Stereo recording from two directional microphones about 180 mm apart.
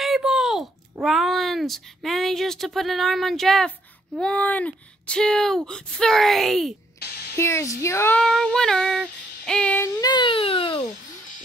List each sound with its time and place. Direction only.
0.0 s speech: centre (ahead or behind)
7.3 s speech: 15° left (ahead or behind)
8.2 s speech: centre (ahead or behind)
9.9 s a child's voice: 25° left (ahead or behind)